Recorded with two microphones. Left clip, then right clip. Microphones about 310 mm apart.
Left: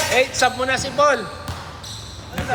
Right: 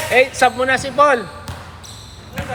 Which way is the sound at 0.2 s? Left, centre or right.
Right.